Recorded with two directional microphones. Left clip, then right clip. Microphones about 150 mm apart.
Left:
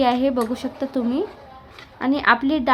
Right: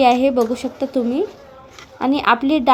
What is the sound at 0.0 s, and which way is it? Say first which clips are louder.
A woman's voice: right 5 dB; 10° right (ahead or behind).